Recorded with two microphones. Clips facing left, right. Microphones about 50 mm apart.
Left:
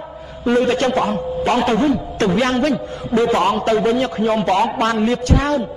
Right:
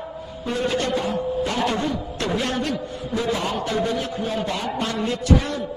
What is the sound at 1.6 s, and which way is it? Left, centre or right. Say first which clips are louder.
A man's voice: left 7 dB; left.